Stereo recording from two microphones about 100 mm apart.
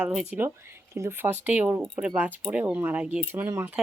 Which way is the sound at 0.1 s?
5° right (ahead or behind).